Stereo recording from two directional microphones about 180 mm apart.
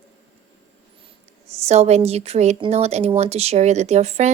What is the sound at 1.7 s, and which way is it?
A woman's voice, 35° right (ahead or behind).